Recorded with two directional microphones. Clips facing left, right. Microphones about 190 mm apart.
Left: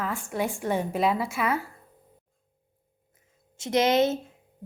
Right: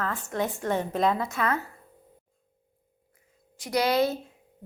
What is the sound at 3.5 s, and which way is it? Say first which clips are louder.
Speech: left 2 dB; 25° left (ahead or behind).